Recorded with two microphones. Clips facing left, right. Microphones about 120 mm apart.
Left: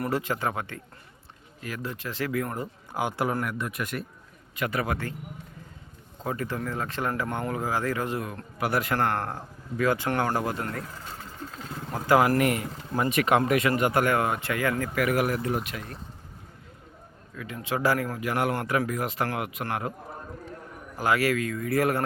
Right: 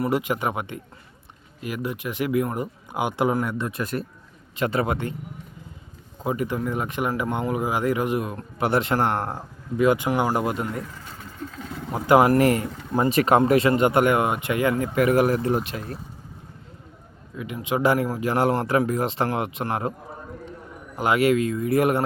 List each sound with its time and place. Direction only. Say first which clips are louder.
0.0 s speech: right 4 dB; 15° right (ahead or behind)
6.2 s speech: right 5 dB; 15° right (ahead or behind)
11.9 s speech: right 4 dB; 20° right (ahead or behind)
17.3 s speech: right 5 dB; 15° right (ahead or behind)
20.9 s speech: right 5 dB; 20° right (ahead or behind)